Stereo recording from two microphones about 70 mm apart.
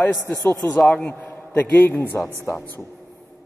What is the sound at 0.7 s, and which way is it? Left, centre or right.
Speech, centre.